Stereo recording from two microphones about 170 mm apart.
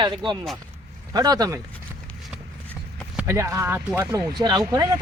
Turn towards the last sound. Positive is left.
turn(degrees=-20)  # may be behind; listen again after turning